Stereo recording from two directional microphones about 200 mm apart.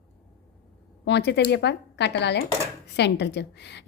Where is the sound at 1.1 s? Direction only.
60° left (ahead or behind).